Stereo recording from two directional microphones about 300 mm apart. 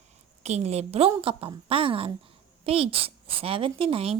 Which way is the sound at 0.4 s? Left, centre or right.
Right.